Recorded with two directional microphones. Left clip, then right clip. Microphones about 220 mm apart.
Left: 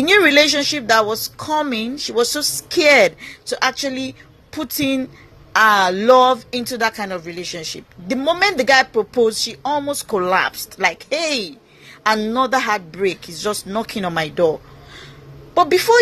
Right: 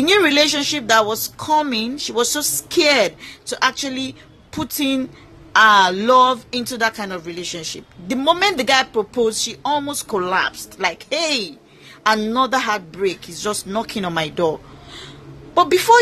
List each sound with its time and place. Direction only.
0.0 s a woman's voice: 10° left (ahead or behind)